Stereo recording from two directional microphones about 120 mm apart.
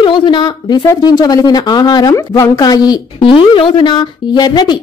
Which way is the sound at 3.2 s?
45° left (ahead or behind).